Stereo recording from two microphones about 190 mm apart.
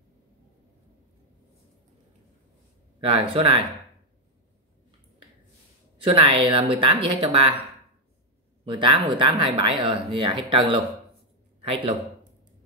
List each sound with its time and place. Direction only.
3.0 s speech: 25° right (ahead or behind)
6.0 s speech: 25° right (ahead or behind)
8.6 s speech: 25° right (ahead or behind)